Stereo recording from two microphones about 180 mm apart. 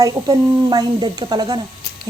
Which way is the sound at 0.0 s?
20° right (ahead or behind).